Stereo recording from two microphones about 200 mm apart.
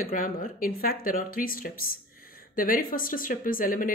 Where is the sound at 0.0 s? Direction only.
45° left (ahead or behind).